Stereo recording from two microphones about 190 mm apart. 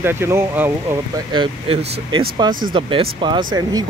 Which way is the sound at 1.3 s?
25° right (ahead or behind).